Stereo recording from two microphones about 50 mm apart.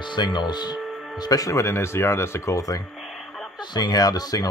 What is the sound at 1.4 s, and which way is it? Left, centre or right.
Speech, left.